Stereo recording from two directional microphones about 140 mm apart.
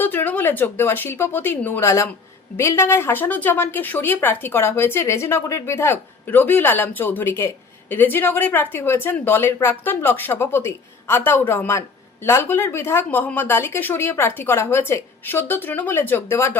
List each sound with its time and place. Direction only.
0.0 s speech: 15° left (ahead or behind)